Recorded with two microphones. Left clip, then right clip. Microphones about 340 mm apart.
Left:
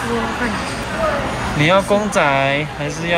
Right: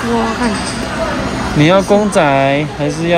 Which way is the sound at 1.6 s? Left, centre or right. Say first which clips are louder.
Right 4 dB; centre.